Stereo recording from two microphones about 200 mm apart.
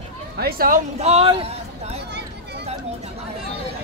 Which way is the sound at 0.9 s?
30° right (ahead or behind).